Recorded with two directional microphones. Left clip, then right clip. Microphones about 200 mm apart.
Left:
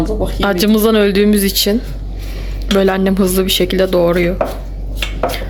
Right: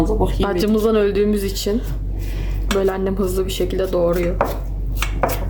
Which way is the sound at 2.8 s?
10° left (ahead or behind).